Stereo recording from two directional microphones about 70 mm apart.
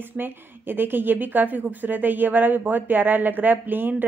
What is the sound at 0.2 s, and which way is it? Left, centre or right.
A woman's voice, right.